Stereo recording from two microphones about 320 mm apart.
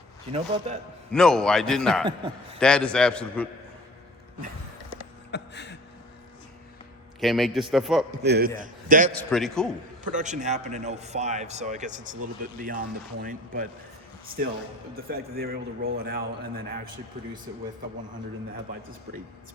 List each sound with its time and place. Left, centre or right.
0.3 s a man's voice: centre
1.1 s a man's voice: centre
2.0 s a man's voice: centre
2.6 s a man's voice: centre
5.3 s a sound: left
7.2 s a man's voice: centre
8.2 s a man's voice: right
9.1 s a man's voice: centre
10.0 s a man's voice: right
14.9 s a man's voice: right